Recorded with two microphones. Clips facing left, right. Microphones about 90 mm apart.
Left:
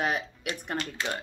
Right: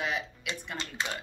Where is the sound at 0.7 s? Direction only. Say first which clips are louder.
Left 3 dB; 20° right (ahead or behind).